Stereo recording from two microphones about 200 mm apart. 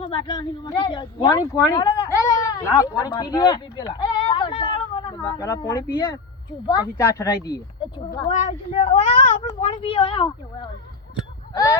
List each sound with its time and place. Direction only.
0.0 s a woman's voice: 25° left (ahead or behind)
8.3 s speech: 35° left (ahead or behind); by 11.8 s 15° left (ahead or behind)